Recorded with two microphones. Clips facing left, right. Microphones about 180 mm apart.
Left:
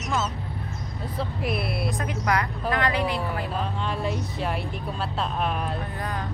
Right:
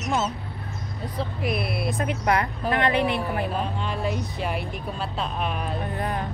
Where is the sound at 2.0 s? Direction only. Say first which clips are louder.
Right 3 dB; 25° right (ahead or behind).